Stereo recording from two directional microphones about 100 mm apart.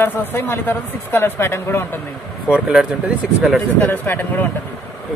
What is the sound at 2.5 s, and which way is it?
Speech, 5° right (ahead or behind).